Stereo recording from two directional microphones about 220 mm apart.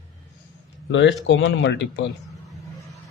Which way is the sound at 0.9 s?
55° left (ahead or behind).